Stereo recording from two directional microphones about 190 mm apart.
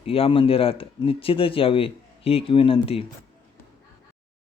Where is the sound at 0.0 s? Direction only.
30° left (ahead or behind).